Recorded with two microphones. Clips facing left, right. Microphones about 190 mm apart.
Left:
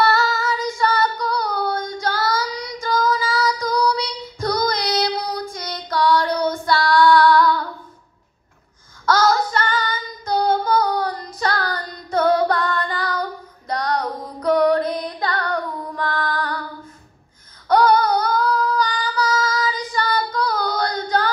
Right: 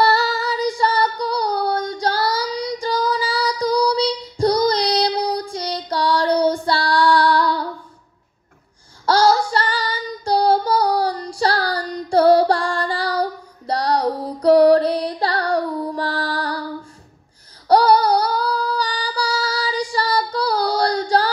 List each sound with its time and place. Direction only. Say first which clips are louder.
0.0 s female singing: right 1 dB; 35° right (ahead or behind)
9.0 s a sound: right 2 dB; 30° right (ahead or behind)
9.5 s female singing: even; 35° right (ahead or behind)
17.6 s female singing: right 2 dB; 35° right (ahead or behind)